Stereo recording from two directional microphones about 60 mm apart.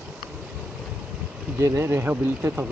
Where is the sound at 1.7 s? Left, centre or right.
Right.